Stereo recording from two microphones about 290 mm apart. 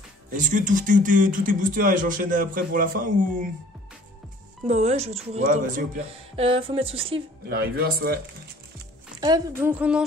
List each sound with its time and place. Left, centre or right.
0.3 s speech: right
4.6 s speech: right
7.4 s speech: right
9.2 s speech: centre